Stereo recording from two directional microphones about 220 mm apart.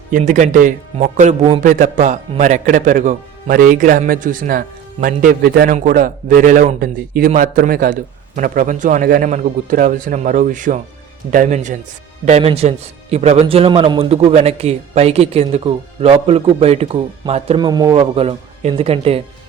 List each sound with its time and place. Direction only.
0.1 s a man's voice: 35° right (ahead or behind)